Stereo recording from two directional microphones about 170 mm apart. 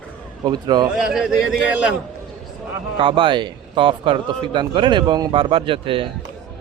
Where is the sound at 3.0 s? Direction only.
30° right (ahead or behind).